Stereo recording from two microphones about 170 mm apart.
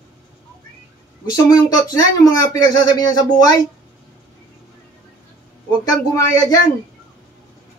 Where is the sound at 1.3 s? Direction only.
25° left (ahead or behind).